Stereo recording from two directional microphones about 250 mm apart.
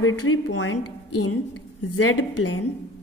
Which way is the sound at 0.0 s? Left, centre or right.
Left.